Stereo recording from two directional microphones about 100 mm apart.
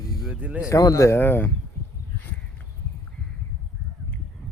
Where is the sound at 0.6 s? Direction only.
35° left (ahead or behind).